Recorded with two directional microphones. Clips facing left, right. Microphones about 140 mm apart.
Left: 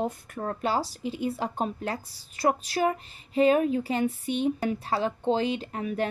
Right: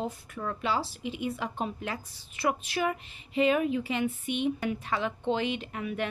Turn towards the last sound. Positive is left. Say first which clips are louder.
# left 4 dB
turn(degrees=35)  # may be behind; listen again after turning